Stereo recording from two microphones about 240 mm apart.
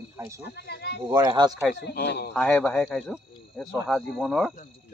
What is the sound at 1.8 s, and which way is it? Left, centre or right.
Speech, left.